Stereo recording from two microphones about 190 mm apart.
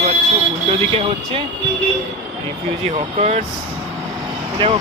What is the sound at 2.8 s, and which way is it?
Speech, 30° right (ahead or behind).